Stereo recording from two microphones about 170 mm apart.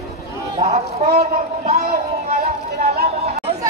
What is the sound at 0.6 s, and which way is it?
Speech, 40° right (ahead or behind).